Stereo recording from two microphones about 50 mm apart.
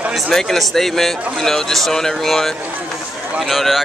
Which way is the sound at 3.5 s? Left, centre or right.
Centre.